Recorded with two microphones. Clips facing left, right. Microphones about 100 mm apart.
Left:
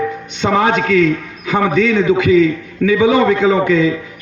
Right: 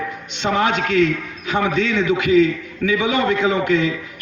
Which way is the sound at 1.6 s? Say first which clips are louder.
Left 6 dB; 40° left (ahead or behind).